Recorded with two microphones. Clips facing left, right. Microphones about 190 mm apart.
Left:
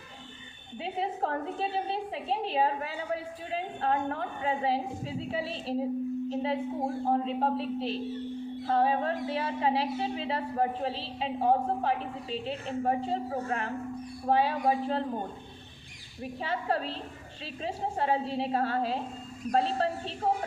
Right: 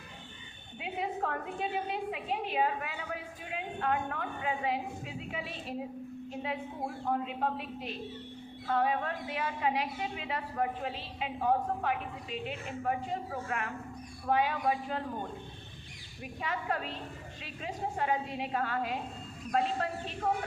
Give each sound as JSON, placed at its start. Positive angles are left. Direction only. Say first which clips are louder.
{"t": 0.8, "sound": "a woman's voice", "louder": "left 3 dB", "side_deg": 30}